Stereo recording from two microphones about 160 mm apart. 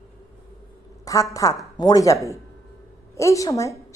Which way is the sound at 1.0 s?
20° left (ahead or behind).